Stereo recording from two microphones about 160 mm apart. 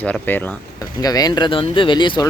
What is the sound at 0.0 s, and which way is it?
Speech, 10° left (ahead or behind).